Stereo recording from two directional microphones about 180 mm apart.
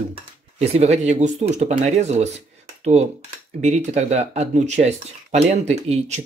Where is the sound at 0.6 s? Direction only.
35° right (ahead or behind).